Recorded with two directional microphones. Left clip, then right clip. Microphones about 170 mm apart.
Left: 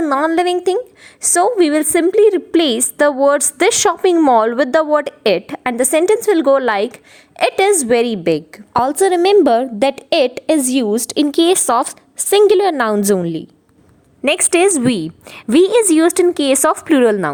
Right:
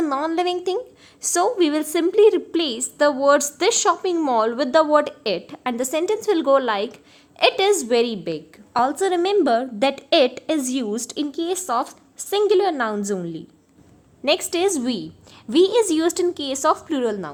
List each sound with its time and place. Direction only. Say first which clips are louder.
0.1 s a woman's voice: left 7 dB; 30° left (ahead or behind)
11.3 s a woman's voice: left 11 dB; 60° left (ahead or behind)